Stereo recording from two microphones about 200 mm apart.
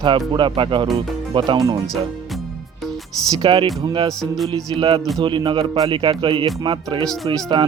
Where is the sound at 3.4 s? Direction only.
25° right (ahead or behind).